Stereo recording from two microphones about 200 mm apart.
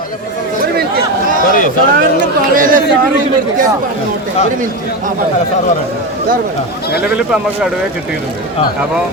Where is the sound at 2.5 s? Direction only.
45° right (ahead or behind).